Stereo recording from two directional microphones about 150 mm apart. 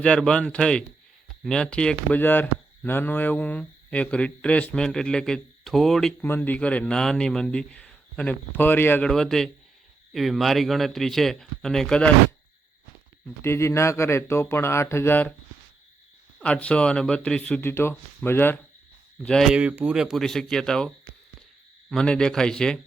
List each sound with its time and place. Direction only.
0.0 s speech: 5° left (ahead or behind)
6.2 s speech: 15° left (ahead or behind)
9.0 s speech: 5° left (ahead or behind)
13.4 s speech: 15° left (ahead or behind)
16.4 s speech: 10° left (ahead or behind)
19.2 s speech: 5° left (ahead or behind)